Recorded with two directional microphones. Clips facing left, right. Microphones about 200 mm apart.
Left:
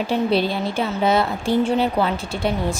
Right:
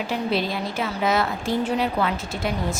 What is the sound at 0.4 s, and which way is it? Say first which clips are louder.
A woman's voice: left 4 dB; 30° left (ahead or behind).